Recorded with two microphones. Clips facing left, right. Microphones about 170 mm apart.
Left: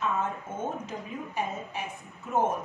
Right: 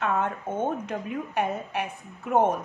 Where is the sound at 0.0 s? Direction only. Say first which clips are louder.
Right 3 dB; 65° right (ahead or behind).